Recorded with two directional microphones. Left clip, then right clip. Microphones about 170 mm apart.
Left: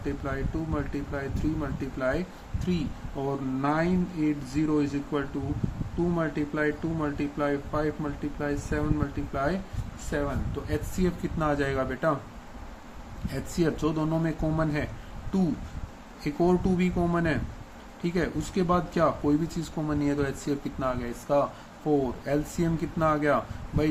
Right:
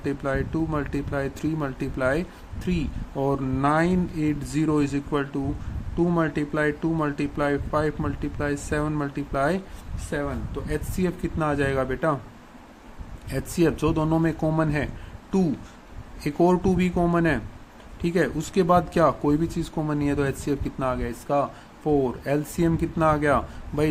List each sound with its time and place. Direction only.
0.0 s speech: 45° right (ahead or behind)
3.2 s speech: 45° right (ahead or behind)
10.1 s speech: 35° right (ahead or behind)
13.3 s speech: 35° right (ahead or behind)
16.2 s speech: 40° right (ahead or behind)